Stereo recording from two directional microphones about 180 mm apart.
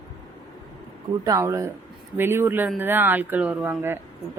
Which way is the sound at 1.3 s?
15° right (ahead or behind).